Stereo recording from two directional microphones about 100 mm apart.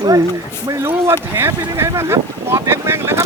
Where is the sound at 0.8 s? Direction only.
25° right (ahead or behind).